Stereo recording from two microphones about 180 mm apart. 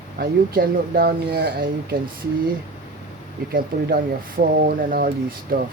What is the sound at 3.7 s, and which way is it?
Speech, 50° right (ahead or behind).